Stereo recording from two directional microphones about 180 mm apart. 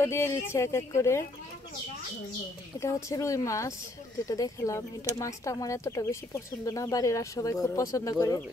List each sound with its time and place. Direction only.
0.0 s speech: 15° left (ahead or behind)
2.8 s speech: 15° left (ahead or behind)